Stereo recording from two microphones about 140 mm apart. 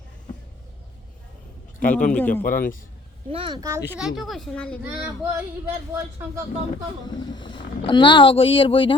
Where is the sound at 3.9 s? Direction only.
5° right (ahead or behind).